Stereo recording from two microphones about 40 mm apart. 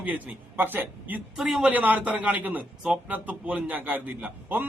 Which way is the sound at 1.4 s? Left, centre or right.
Centre.